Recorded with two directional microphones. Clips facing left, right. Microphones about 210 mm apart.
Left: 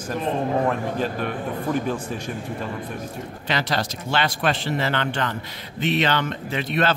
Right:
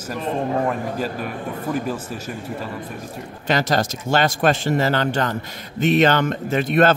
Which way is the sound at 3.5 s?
45° right (ahead or behind).